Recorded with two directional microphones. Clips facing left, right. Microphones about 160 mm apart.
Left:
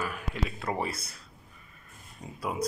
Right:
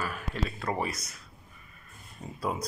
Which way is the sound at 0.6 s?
25° left (ahead or behind).